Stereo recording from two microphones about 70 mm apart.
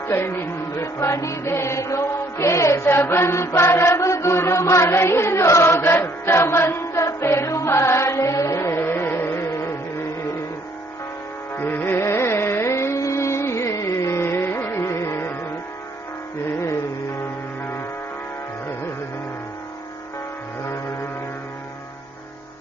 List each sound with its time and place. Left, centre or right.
0.1 s music: left
11.5 s music: left
11.9 s carnatic music: left